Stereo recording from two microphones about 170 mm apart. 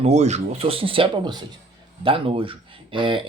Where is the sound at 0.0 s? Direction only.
40° right (ahead or behind).